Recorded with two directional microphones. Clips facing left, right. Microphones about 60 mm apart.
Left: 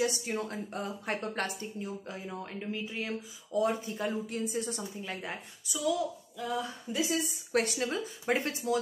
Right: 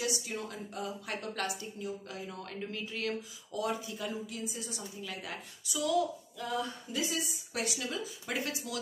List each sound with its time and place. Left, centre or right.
0.0 s a woman's voice: left
2.2 s speech: centre; by 4.8 s left
5.0 s speech: left
6.3 s a sound: centre
7.1 s a woman's voice: left